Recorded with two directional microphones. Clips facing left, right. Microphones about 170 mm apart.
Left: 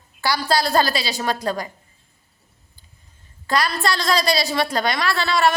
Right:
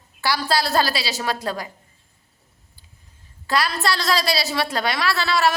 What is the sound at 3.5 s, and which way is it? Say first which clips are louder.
A woman's voice: left 1 dB; 5° right (ahead or behind).